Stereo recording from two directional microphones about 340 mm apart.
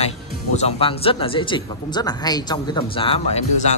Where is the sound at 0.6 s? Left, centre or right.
Centre.